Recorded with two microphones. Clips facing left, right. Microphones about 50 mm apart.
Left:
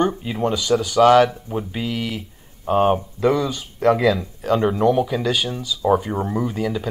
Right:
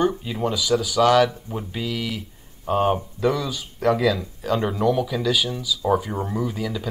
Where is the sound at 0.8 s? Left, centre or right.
Left.